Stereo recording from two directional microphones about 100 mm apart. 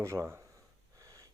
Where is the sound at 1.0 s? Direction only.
35° right (ahead or behind).